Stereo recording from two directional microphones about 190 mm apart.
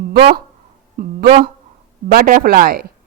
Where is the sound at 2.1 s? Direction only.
50° right (ahead or behind).